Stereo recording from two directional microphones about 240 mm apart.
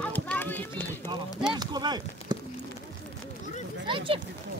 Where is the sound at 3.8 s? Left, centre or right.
Right.